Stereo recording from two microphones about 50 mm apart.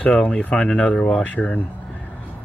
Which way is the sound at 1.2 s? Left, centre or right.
Left.